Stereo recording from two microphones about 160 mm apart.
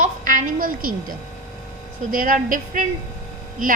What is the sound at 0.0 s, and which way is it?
A woman's voice, 55° right (ahead or behind).